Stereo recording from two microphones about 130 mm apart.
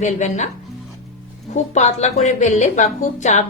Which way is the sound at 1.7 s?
60° left (ahead or behind).